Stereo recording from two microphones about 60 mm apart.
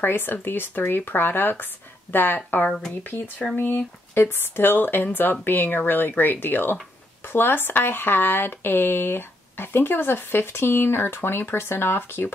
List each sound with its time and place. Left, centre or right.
0.0 s speech: left